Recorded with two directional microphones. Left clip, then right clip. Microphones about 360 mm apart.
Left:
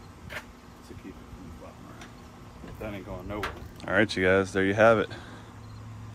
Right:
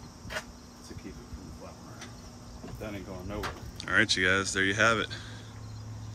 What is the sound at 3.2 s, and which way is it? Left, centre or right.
Speech, centre.